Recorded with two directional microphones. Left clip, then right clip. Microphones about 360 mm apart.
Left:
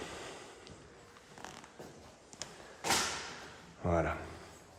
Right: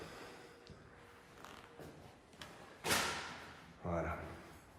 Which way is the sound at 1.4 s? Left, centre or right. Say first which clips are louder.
Left 6 dB; centre.